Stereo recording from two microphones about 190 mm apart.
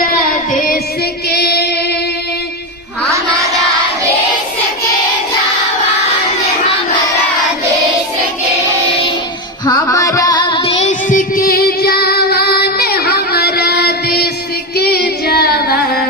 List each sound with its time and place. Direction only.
1.3 s child singing: 60° left (ahead or behind)
3.1 s a sound: 15° right (ahead or behind)
9.6 s music: 20° left (ahead or behind); by 14.3 s 55° left (ahead or behind)
14.8 s female singing: 55° left (ahead or behind)